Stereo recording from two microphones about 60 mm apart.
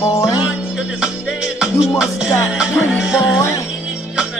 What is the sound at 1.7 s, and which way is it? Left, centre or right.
Music, centre.